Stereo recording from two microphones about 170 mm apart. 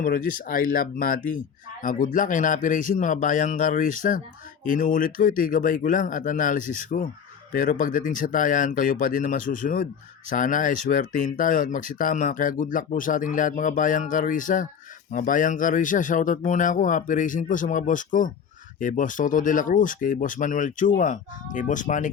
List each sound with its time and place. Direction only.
0.0 s speech: 55° left (ahead or behind)